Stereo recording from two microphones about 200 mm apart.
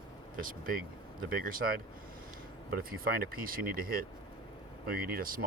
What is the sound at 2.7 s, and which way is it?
Speech, 45° right (ahead or behind).